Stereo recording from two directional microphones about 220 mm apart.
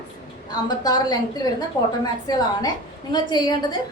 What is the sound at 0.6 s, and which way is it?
A woman's voice, 15° left (ahead or behind).